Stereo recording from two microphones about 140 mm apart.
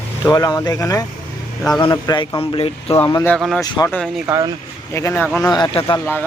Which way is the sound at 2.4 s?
40° left (ahead or behind).